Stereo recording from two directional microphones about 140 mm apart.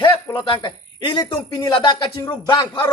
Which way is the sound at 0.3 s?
35° left (ahead or behind).